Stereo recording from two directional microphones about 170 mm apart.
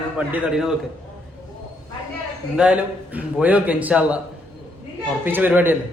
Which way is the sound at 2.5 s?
5° right (ahead or behind).